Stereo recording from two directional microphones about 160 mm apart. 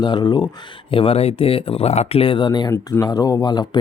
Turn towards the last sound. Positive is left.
turn(degrees=25)  # may be behind; listen again after turning